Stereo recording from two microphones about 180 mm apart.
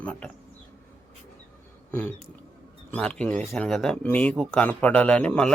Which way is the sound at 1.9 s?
10° left (ahead or behind).